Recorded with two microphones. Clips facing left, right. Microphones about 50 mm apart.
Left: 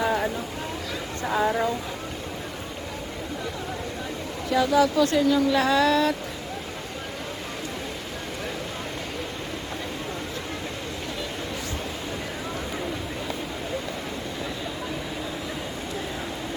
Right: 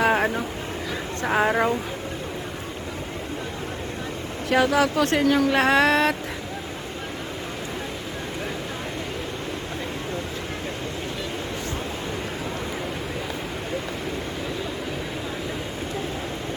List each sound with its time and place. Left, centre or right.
0.0 s a sound: right
1.2 s speech: right
4.4 s speech: right